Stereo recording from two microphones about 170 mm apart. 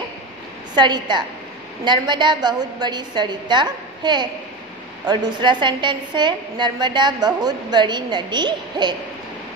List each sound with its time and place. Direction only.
0.7 s a woman's voice: 25° right (ahead or behind)